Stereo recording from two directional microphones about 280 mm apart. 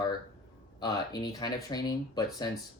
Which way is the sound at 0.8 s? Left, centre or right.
Centre.